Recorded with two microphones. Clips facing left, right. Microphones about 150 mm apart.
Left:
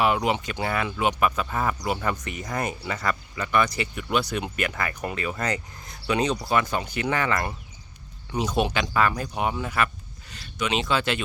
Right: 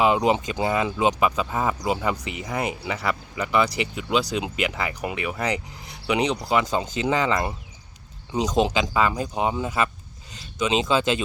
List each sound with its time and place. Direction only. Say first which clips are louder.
0.0 s speech: right 3 dB; 25° right (ahead or behind)